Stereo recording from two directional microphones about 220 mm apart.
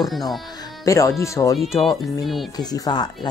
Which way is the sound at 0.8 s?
15° left (ahead or behind).